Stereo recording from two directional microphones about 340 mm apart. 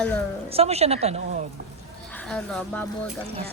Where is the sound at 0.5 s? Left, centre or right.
Centre.